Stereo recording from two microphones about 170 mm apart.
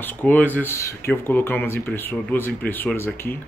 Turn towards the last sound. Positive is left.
turn(degrees=15)  # may be behind; listen again after turning